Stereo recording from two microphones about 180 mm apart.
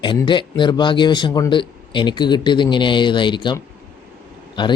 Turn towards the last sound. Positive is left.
turn(degrees=25)  # may be behind; listen again after turning